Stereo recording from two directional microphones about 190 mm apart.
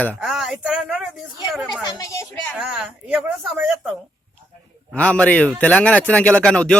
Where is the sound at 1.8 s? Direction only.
20° left (ahead or behind).